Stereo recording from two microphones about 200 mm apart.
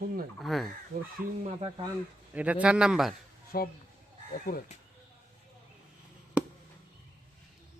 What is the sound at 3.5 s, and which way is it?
Speech, 50° left (ahead or behind).